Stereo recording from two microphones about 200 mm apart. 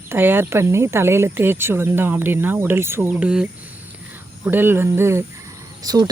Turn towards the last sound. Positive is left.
turn(degrees=-20)  # may be behind; listen again after turning